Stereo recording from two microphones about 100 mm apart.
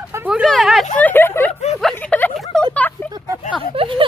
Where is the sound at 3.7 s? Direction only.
60° right (ahead or behind).